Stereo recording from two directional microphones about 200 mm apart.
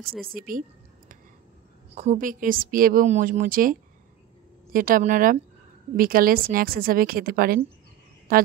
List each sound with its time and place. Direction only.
0.3 s a woman's voice: 45° right (ahead or behind)
4.7 s a woman's voice: 45° right (ahead or behind)